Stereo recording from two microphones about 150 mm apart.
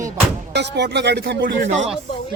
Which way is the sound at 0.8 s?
90° right.